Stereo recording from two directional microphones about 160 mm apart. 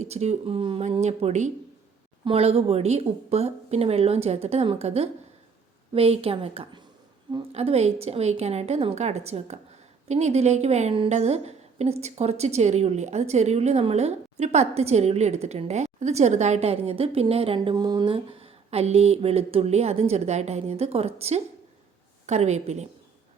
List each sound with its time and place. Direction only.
0.0 s a woman's voice: 45° right (ahead or behind)